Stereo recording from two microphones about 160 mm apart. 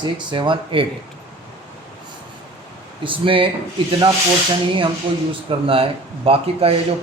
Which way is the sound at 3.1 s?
30° right (ahead or behind).